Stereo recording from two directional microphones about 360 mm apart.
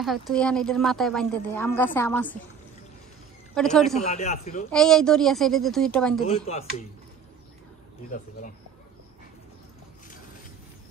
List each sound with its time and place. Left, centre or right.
0.0 s a woman's voice: centre
3.5 s a woman's voice: centre
4.0 s speech: centre
4.6 s a woman's voice: centre
6.2 s speech: centre